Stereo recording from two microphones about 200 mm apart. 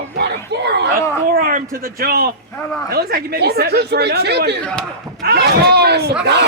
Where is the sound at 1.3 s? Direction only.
45° right (ahead or behind).